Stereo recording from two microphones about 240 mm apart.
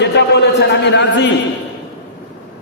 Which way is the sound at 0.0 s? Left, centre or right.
Left.